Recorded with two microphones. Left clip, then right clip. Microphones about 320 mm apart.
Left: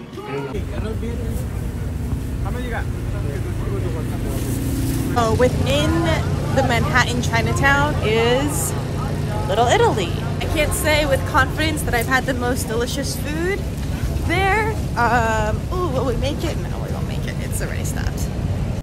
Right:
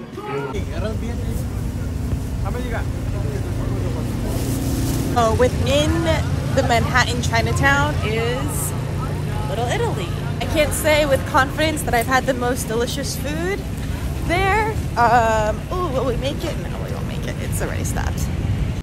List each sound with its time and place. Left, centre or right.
5.1 s speech: centre
9.6 s speech: left
10.4 s speech: centre